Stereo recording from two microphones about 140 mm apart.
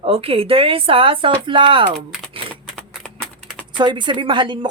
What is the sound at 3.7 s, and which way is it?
Speech, 35° right (ahead or behind).